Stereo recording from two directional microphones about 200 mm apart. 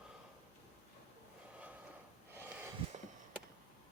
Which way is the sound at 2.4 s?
10° right (ahead or behind).